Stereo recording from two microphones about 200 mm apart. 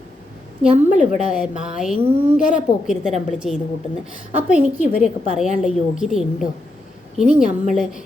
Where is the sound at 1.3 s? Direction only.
5° right (ahead or behind).